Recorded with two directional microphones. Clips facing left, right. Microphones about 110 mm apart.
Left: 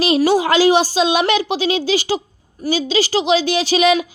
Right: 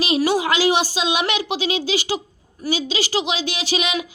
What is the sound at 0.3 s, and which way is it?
A woman's voice, 35° left (ahead or behind).